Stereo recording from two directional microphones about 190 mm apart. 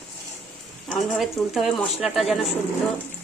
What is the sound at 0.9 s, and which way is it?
Speech, centre (ahead or behind).